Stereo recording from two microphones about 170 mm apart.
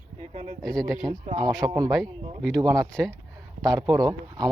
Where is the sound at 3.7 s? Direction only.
20° right (ahead or behind).